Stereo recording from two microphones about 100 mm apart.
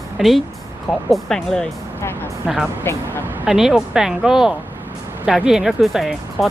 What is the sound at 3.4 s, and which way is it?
Speech, 5° right (ahead or behind).